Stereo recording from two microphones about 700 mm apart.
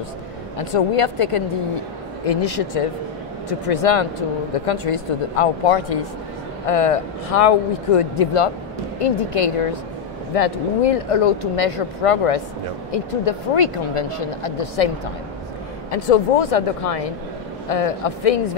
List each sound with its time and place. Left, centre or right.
0.6 s speech: left
15.9 s speech: left